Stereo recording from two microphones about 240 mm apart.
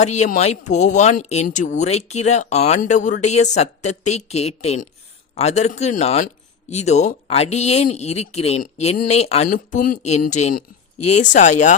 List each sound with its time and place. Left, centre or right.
0.0 s speech: left